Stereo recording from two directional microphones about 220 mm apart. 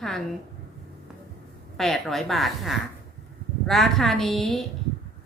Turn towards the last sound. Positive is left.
turn(degrees=0)  # may be behind; listen again after turning